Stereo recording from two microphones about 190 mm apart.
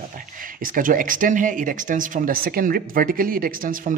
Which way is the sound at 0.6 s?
45° right (ahead or behind).